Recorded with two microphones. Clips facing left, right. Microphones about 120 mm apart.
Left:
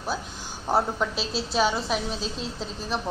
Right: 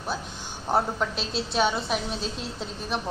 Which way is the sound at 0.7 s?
5° left (ahead or behind).